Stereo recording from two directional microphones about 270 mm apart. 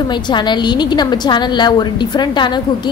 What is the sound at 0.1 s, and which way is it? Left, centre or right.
A woman's voice, centre.